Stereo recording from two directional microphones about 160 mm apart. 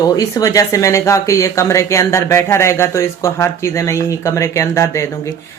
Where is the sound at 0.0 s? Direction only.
25° left (ahead or behind).